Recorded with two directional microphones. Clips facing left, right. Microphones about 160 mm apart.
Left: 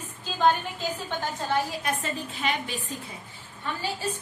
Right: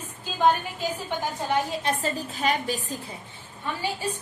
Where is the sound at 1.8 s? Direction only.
35° right (ahead or behind).